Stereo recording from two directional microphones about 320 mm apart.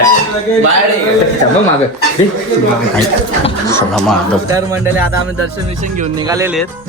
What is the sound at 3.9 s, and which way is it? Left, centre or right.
A man's voice, centre.